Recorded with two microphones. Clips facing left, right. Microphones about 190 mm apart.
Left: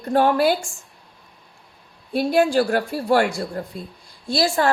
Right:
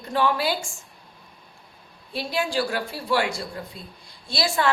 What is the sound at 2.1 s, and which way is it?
A woman's voice, 50° left (ahead or behind).